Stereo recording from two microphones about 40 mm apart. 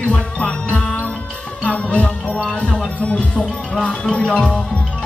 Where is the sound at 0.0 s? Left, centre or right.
Left.